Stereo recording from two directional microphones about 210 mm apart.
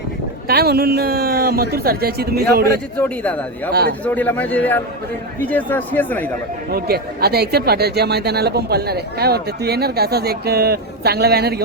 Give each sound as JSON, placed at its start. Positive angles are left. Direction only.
{"t": 0.4, "sound": "speech", "side_deg": -45}
{"t": 3.0, "sound": "speech", "side_deg": 5}
{"t": 3.7, "sound": "speech", "side_deg": -50}
{"t": 4.0, "sound": "speech", "side_deg": 10}
{"t": 6.7, "sound": "speech", "side_deg": -50}